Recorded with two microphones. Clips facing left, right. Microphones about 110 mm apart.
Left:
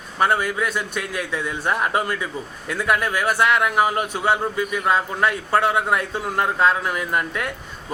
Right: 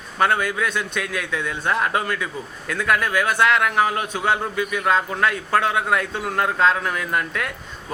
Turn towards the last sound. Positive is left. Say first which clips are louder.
# left 1 dB
turn(degrees=10)  # may be behind; listen again after turning